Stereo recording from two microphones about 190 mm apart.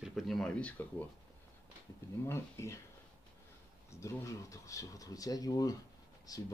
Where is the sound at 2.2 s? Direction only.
15° left (ahead or behind).